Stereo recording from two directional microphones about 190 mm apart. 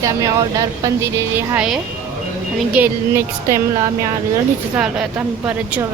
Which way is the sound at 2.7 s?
10° right (ahead or behind).